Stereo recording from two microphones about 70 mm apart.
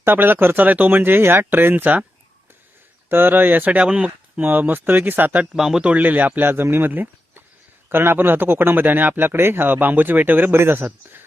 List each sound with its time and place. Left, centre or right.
0.0 s speech: right
3.1 s speech: right
4.4 s speech: right
5.5 s speech: centre
5.9 s speech: right